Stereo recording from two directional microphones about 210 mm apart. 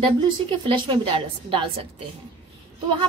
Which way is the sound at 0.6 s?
25° right (ahead or behind).